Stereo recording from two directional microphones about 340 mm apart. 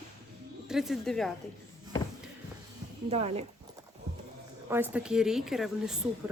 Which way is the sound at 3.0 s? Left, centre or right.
Centre.